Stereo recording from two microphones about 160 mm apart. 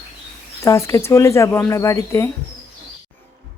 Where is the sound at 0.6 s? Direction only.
20° left (ahead or behind).